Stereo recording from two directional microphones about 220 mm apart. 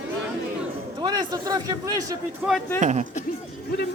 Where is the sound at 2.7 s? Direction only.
30° right (ahead or behind).